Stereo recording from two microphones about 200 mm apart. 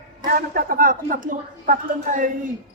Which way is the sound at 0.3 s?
45° right (ahead or behind).